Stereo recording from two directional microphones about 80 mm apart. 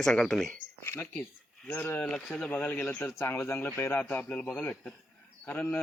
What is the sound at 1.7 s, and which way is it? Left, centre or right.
Speech, left.